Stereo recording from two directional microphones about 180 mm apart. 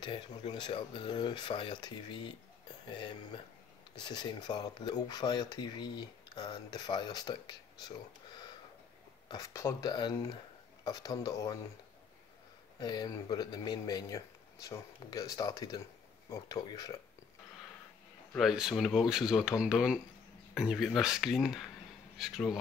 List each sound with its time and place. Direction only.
0.0 s speech: 25° left (ahead or behind)
9.3 s speech: 20° left (ahead or behind)
12.7 s speech: 25° left (ahead or behind)
18.3 s speech: centre (ahead or behind)